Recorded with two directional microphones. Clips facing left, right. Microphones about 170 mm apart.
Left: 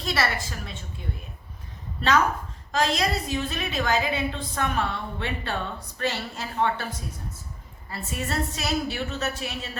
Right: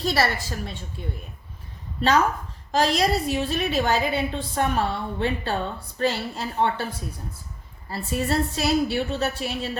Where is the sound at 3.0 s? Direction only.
35° right (ahead or behind).